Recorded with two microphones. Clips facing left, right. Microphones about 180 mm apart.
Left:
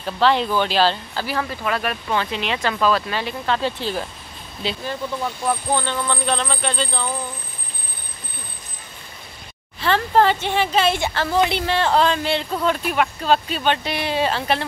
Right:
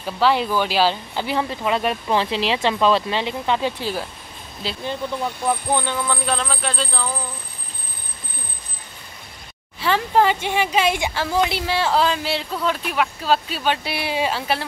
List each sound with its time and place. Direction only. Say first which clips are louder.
0.0 s speech: left 1 dB; 10° right (ahead or behind)
1.2 s speech: right 2 dB; 25° right (ahead or behind); by 7.1 s centre (ahead or behind)
9.8 s speech: left 1 dB; 10° right (ahead or behind)